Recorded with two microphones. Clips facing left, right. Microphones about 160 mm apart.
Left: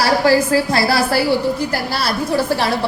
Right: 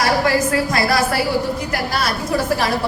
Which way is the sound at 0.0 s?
30° left (ahead or behind).